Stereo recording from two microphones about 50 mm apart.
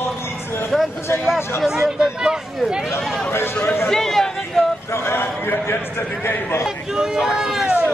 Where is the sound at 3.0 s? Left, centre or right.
Centre.